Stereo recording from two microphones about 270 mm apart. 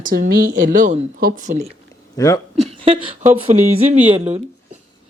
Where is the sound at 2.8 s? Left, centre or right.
Centre.